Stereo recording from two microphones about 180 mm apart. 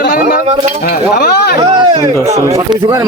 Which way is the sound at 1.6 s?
30° right (ahead or behind).